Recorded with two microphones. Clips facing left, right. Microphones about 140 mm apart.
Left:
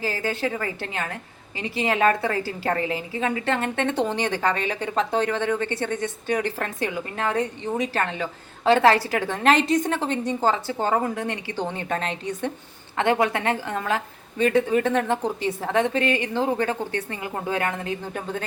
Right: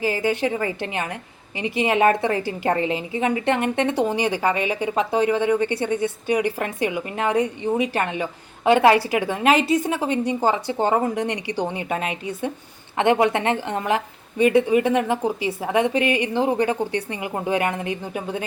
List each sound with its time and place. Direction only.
0.0 s a woman's voice: 15° right (ahead or behind)